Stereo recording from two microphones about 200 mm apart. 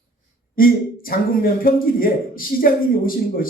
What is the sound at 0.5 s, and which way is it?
A man's voice, 45° left (ahead or behind).